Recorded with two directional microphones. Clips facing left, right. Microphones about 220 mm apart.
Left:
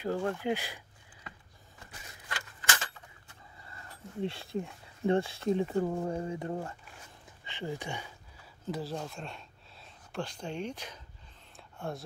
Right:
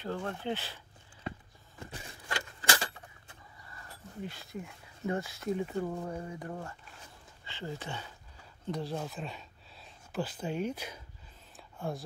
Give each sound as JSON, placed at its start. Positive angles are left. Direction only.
{"t": 0.0, "sound": "speech", "side_deg": 10}
{"t": 1.9, "sound": "a sound", "side_deg": -35}
{"t": 4.2, "sound": "speech", "side_deg": 30}
{"t": 11.5, "sound": "whispering", "side_deg": 0}